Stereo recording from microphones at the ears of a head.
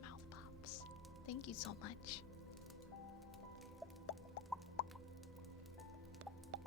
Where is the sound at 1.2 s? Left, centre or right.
Left.